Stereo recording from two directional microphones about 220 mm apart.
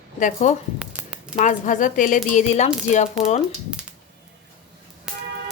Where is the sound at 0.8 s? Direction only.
5° right (ahead or behind).